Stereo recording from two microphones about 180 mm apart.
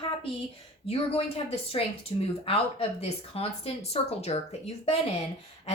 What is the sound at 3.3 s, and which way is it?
A woman's voice, 35° left (ahead or behind).